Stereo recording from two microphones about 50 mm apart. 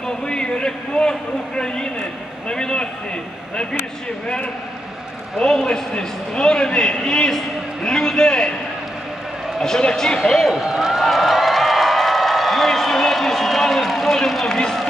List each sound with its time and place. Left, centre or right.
0.3 s a sound: centre
1.5 s a man's voice: centre
5.4 s a man's voice: centre
9.6 s a man's voice: centre
10.5 s a sound: centre
14.5 s run: centre